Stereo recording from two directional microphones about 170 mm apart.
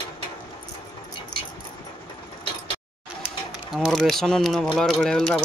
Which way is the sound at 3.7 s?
Centre (ahead or behind).